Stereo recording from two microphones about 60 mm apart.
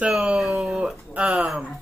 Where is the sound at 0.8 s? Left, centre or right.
Centre.